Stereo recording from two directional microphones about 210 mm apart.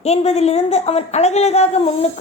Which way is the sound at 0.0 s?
30° left (ahead or behind).